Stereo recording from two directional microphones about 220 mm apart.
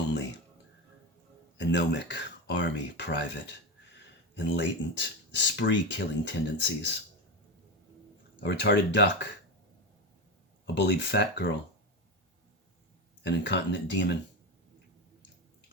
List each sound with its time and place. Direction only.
1.5 s speech: 50° left (ahead or behind)
4.4 s speech: 55° left (ahead or behind)
8.4 s speech: 50° left (ahead or behind)
10.8 s speech: 50° left (ahead or behind)
13.2 s speech: 50° left (ahead or behind)